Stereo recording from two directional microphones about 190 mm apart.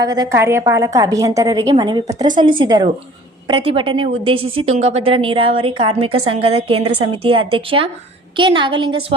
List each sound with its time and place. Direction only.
0.0 s a woman's voice: 20° right (ahead or behind)